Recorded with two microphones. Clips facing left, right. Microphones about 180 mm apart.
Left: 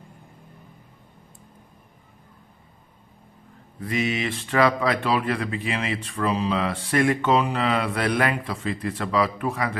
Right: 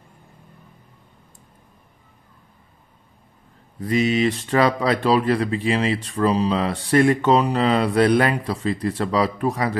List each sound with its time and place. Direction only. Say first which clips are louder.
3.8 s speech: right 6 dB; 35° right (ahead or behind)